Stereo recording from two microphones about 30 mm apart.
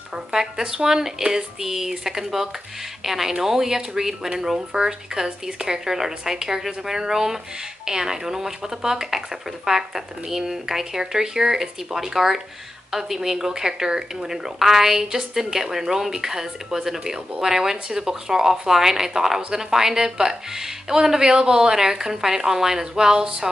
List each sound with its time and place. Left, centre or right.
0.1 s speech: centre